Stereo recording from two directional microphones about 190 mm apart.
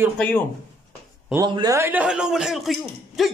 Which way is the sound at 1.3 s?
20° right (ahead or behind).